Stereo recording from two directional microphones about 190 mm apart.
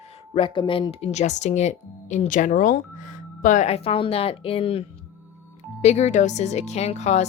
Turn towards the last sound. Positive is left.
turn(degrees=35)  # may be behind; listen again after turning